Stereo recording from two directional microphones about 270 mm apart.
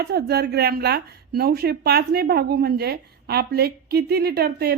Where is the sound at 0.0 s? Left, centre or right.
Right.